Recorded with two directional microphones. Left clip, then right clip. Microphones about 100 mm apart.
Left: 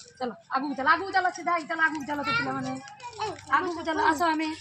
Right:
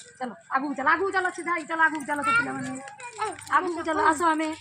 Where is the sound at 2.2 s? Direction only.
Centre (ahead or behind).